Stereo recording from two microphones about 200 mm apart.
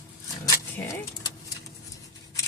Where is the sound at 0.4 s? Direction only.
15° left (ahead or behind).